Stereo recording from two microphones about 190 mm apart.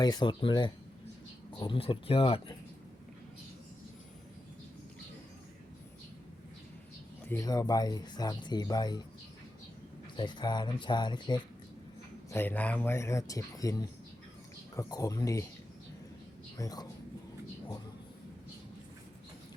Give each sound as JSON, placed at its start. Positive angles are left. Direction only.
{"t": 0.0, "sound": "speech", "side_deg": 20}
{"t": 7.3, "sound": "speech", "side_deg": 15}
{"t": 10.2, "sound": "speech", "side_deg": 25}
{"t": 12.3, "sound": "speech", "side_deg": 10}
{"t": 16.6, "sound": "speech", "side_deg": 20}